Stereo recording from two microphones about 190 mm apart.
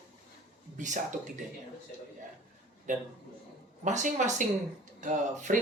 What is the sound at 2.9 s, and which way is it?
Speech, 40° right (ahead or behind).